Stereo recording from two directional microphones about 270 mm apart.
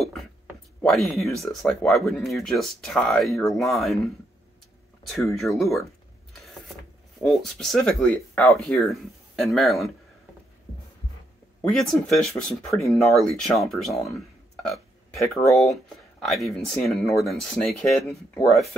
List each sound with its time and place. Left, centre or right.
0.0 s a sound: centre
0.8 s speech: centre
7.2 s speech: centre
11.7 s speech: centre
14.7 s hiccup: centre
15.5 s speech: centre